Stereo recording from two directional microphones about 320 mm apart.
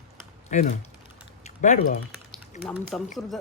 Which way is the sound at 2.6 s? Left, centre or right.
Centre.